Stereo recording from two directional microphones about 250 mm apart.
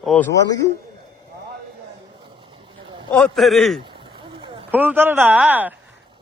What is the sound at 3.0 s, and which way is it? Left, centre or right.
Speech, centre.